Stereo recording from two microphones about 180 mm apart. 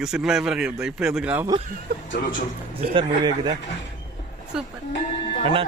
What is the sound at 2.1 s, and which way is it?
Speech, 50° left (ahead or behind).